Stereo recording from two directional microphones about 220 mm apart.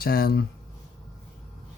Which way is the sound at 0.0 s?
45° left (ahead or behind).